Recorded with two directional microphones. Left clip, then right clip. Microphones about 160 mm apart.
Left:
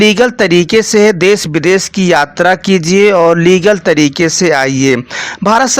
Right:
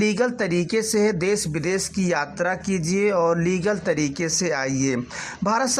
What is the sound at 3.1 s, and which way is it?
Speech, 30° left (ahead or behind).